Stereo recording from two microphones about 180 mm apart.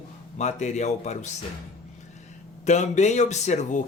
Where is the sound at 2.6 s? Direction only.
40° left (ahead or behind).